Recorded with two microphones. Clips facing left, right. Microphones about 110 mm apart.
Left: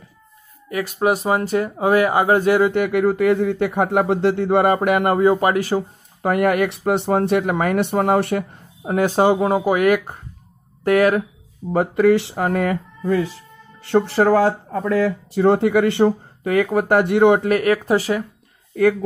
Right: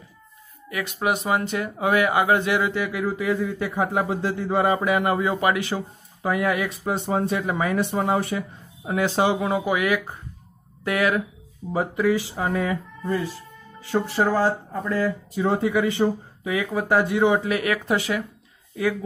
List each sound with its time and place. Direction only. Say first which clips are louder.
0.7 s speech: left 6 dB; 40° left (ahead or behind)
2.7 s speech: left 8 dB; 60° left (ahead or behind); by 5.9 s 40° left (ahead or behind)
6.2 s speech: left 6 dB; 65° left (ahead or behind)
8.8 s speech: left 5 dB; 45° left (ahead or behind)
11.7 s speech: left 6 dB; 80° left
13.7 s speech: left 6 dB; 75° left (ahead or behind); by 18.2 s 35° left (ahead or behind)